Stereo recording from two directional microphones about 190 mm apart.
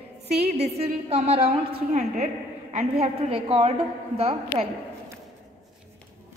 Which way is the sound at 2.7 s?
35° right (ahead or behind).